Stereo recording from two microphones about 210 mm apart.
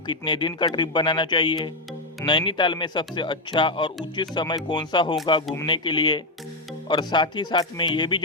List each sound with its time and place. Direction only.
0.1 s speech: 20° left (ahead or behind)